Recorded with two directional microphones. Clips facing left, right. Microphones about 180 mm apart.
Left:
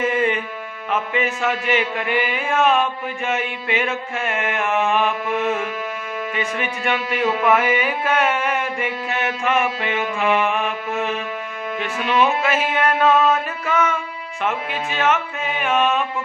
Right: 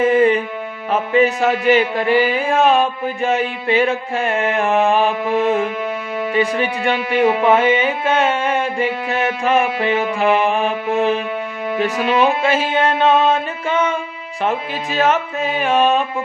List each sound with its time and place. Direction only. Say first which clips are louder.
0.0 s music: right 7 dB; 35° right (ahead or behind)